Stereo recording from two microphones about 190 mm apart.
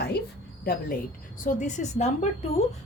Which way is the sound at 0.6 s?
50° left (ahead or behind).